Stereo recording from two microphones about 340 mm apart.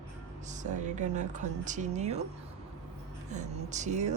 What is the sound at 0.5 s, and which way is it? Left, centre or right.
Speech, right.